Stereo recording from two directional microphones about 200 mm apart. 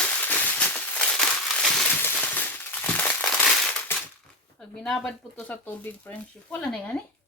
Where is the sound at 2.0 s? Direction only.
10° left (ahead or behind).